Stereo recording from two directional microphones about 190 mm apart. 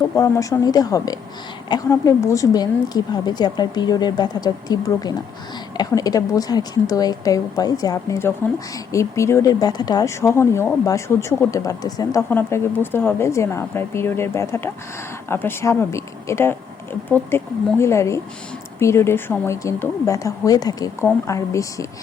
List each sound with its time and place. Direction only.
0.2 s a woman's voice: 15° left (ahead or behind)